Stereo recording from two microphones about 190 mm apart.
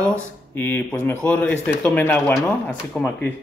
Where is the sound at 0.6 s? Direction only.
10° left (ahead or behind).